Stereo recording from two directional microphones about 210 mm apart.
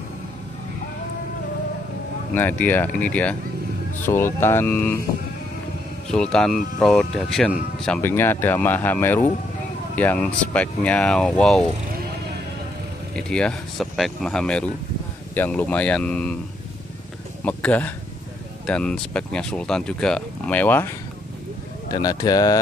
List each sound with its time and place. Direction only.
2.3 s speech: 10° left (ahead or behind)
6.1 s speech: 5° left (ahead or behind)
13.1 s speech: 5° left (ahead or behind)
17.5 s speech: 5° left (ahead or behind)
21.9 s speech: 15° left (ahead or behind)